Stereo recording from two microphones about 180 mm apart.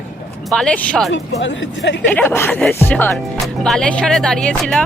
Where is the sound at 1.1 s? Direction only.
85° left.